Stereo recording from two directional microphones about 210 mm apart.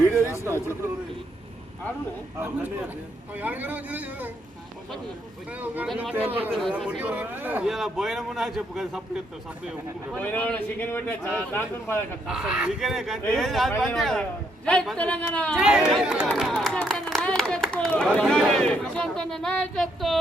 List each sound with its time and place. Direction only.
0.2 s a sound: 15° left (ahead or behind)
2.4 s a man's voice: 10° right (ahead or behind)
5.5 s speech: 5° right (ahead or behind)
10.2 s a man's voice: 10° left (ahead or behind)
12.3 s speech: 5° right (ahead or behind)